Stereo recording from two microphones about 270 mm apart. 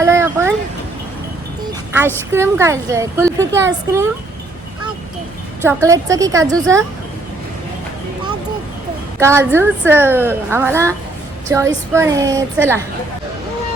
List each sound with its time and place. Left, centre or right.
0.0 s a sound: centre
2.3 s a woman's voice: centre
5.6 s a woman's voice: centre
9.1 s a woman's voice: centre